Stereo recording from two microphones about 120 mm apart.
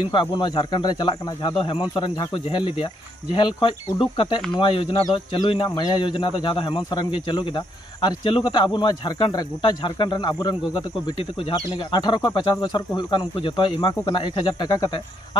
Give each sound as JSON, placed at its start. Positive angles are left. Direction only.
{"t": 0.1, "sound": "speech", "side_deg": 40}
{"t": 11.5, "sound": "speech", "side_deg": 40}
{"t": 14.6, "sound": "speech", "side_deg": 35}